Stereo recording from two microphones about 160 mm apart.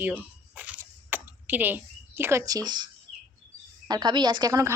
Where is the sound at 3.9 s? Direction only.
25° right (ahead or behind).